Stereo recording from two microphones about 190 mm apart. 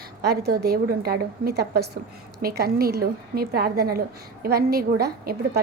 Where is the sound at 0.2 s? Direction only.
60° right (ahead or behind).